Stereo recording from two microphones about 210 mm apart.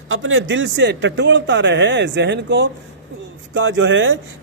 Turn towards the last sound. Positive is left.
turn(degrees=-65)  # may be behind; listen again after turning